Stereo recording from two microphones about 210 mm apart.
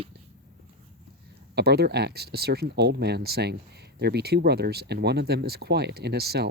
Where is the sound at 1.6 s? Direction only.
50° right (ahead or behind).